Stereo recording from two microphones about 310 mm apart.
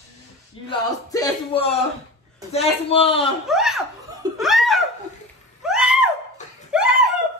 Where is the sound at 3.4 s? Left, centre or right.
Centre.